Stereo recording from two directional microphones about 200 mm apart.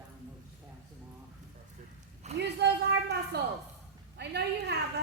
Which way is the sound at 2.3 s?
35° right (ahead or behind).